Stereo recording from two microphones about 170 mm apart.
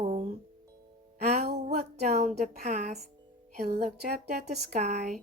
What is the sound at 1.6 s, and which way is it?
Speech, 45° right (ahead or behind).